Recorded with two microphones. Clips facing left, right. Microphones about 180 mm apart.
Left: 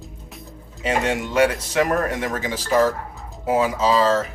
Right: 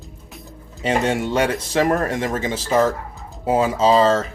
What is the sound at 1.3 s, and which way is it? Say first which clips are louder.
Speech: left 1 dB; 30° right (ahead or behind).